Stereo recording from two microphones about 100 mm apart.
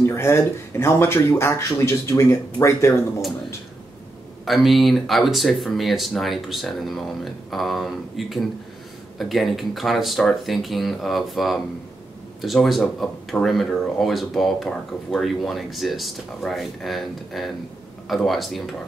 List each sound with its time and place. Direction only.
0.0 s speech: 25° left (ahead or behind)
4.5 s speech: centre (ahead or behind)